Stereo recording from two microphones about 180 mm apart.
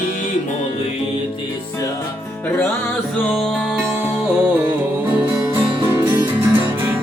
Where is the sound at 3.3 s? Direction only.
Centre (ahead or behind).